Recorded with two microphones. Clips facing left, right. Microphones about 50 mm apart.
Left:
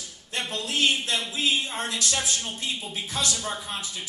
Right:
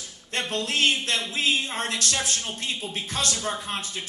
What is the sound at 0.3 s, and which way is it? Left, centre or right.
A woman's voice, right.